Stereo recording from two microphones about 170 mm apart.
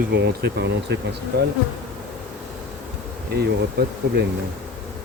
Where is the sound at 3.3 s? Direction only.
70° right (ahead or behind).